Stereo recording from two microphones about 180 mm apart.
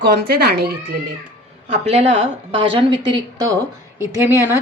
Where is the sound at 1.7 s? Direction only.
35° right (ahead or behind).